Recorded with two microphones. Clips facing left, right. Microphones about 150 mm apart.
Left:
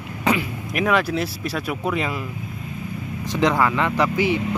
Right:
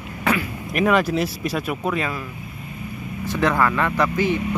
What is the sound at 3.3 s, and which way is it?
Speech, 15° left (ahead or behind).